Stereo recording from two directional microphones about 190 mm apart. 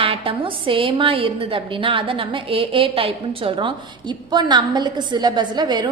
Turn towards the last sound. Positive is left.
turn(degrees=-20)  # may be behind; listen again after turning